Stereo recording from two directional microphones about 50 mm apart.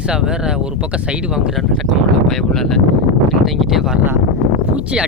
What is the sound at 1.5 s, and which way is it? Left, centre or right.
Speech, centre.